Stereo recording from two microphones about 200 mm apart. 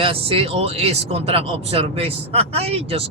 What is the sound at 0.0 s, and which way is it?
Speech, 30° right (ahead or behind).